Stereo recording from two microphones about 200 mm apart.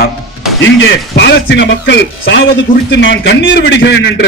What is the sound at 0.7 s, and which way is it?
A man's voice, 60° left (ahead or behind).